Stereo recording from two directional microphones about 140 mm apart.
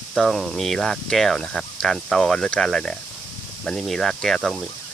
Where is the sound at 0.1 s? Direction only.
Centre (ahead or behind).